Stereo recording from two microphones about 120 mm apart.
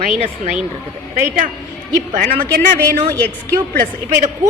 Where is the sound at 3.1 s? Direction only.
15° left (ahead or behind).